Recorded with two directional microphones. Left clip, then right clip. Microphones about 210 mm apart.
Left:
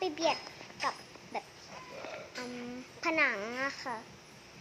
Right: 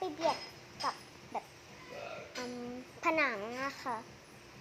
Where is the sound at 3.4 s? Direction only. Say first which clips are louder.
Left 3 dB; 15° left (ahead or behind).